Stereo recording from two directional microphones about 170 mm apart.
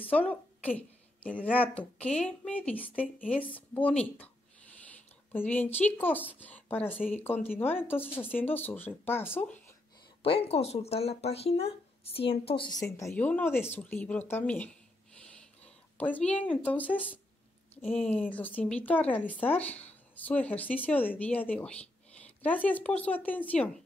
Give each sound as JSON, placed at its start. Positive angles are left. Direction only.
{"t": 0.1, "sound": "a sound", "side_deg": 10}
{"t": 1.4, "sound": "speech", "side_deg": 10}
{"t": 10.2, "sound": "speech", "side_deg": 35}
{"t": 12.9, "sound": "speech", "side_deg": 15}